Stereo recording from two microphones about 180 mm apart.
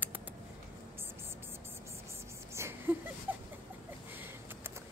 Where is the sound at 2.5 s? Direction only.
15° right (ahead or behind).